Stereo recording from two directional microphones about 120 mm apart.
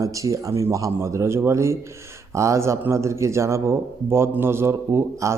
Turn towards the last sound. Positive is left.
turn(degrees=-25)  # may be behind; listen again after turning